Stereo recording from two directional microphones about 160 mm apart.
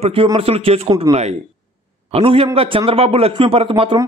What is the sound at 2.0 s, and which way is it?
A man's voice, 40° right (ahead or behind).